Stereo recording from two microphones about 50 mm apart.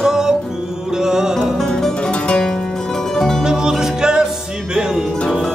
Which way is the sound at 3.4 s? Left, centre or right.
Centre.